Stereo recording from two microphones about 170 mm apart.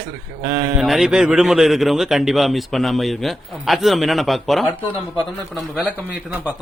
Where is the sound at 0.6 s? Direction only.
5° right (ahead or behind).